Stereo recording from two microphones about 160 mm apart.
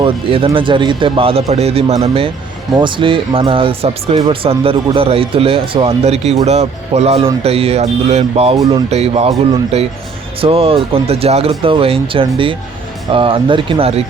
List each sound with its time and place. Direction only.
0.0 s speech: 35° right (ahead or behind)